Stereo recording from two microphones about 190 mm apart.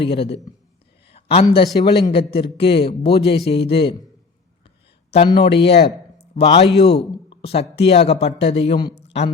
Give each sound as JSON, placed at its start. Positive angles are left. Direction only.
{"t": 0.0, "sound": "a man's voice", "side_deg": 30}
{"t": 1.1, "sound": "a sound", "side_deg": 30}
{"t": 1.5, "sound": "a man's voice", "side_deg": 20}
{"t": 5.1, "sound": "a man's voice", "side_deg": 30}